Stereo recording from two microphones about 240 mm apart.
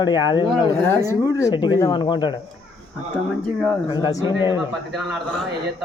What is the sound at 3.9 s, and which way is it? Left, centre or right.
Speech, centre.